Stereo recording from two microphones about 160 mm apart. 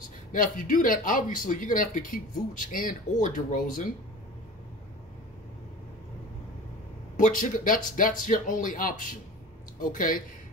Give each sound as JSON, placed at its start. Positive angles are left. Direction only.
{"t": 0.3, "sound": "speech", "side_deg": 55}
{"t": 7.2, "sound": "speech", "side_deg": 55}